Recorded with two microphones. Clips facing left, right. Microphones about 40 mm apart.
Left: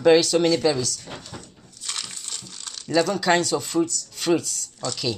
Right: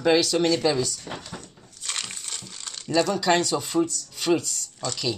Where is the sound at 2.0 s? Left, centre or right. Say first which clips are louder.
Right 1 dB; centre.